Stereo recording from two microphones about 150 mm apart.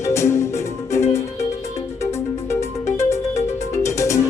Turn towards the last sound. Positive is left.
turn(degrees=20)  # may be behind; listen again after turning